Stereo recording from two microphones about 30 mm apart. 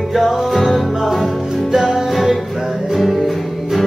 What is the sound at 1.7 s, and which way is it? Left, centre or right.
Music, centre.